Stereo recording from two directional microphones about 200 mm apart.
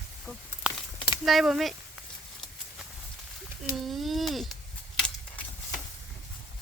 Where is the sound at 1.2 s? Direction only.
Centre (ahead or behind).